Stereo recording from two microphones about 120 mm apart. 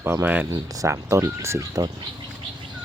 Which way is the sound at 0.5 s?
30° right (ahead or behind).